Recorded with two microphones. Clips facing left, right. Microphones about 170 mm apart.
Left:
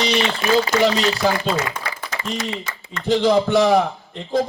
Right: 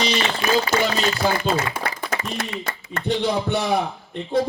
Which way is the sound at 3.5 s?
75° left (ahead or behind).